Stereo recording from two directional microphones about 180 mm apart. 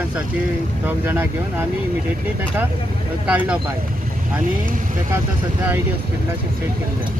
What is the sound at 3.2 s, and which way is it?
Speech, 5° right (ahead or behind).